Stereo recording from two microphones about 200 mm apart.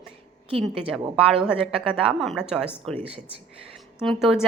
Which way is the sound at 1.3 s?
5° right (ahead or behind).